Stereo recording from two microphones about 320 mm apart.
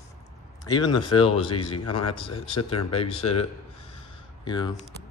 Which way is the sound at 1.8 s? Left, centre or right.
Left.